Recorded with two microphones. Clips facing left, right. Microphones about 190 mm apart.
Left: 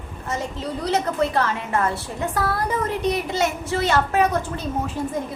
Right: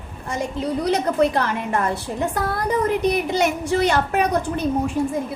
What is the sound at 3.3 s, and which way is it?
A child's voice, 15° right (ahead or behind).